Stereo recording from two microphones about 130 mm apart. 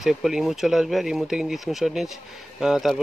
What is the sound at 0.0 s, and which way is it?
Speech, 5° right (ahead or behind).